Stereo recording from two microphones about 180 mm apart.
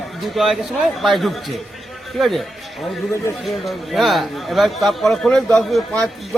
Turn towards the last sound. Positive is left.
turn(degrees=0)  # may be behind; listen again after turning